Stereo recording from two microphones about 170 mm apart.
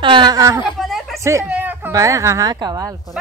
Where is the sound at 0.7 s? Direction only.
Centre (ahead or behind).